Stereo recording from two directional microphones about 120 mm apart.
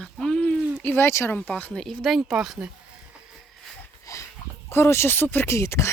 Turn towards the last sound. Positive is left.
turn(degrees=25)  # may be behind; listen again after turning